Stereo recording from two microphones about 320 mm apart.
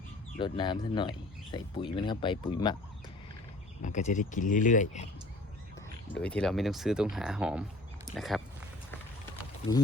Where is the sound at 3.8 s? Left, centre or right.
Left.